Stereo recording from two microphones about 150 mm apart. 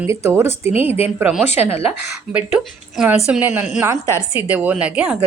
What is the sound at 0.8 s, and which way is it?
Speech, 40° left (ahead or behind).